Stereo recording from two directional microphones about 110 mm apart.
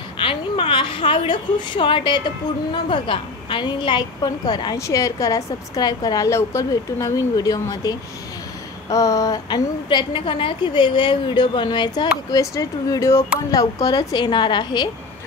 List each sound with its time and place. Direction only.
0.2 s a woman's voice: 55° left (ahead or behind)
4.7 s a woman's voice: 30° left (ahead or behind); by 12.1 s 45° left (ahead or behind)
12.3 s a woman's voice: 35° left (ahead or behind)